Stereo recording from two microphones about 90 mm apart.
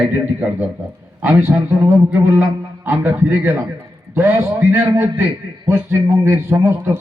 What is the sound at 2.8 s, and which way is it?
A man's voice, 20° right (ahead or behind).